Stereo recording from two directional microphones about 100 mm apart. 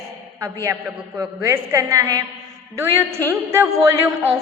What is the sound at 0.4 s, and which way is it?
A woman's voice, 30° right (ahead or behind).